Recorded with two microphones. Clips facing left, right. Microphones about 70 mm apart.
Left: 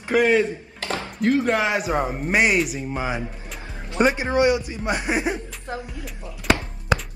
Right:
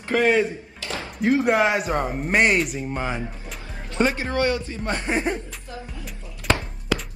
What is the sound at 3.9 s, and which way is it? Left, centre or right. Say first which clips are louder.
Speech: left 3 dB; centre.